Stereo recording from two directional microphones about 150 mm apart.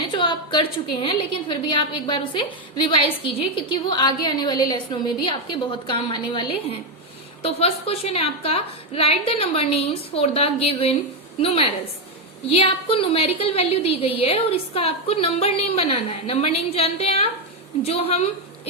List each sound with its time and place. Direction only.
0.2 s a woman's voice: 35° left (ahead or behind)
7.4 s a woman's voice: 40° left (ahead or behind)